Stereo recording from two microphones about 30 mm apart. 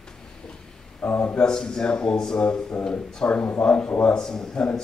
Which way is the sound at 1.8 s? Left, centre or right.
Left.